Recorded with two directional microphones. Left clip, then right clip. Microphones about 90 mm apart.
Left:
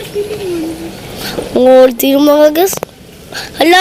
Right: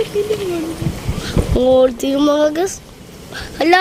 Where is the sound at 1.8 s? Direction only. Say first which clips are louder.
Left 6 dB; 35° left (ahead or behind).